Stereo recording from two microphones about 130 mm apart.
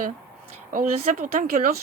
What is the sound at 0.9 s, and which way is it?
Speech, 60° right (ahead or behind).